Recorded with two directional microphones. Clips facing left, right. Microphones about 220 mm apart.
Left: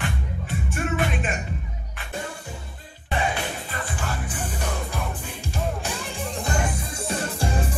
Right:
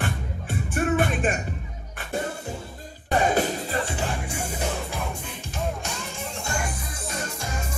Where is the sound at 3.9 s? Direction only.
20° right (ahead or behind).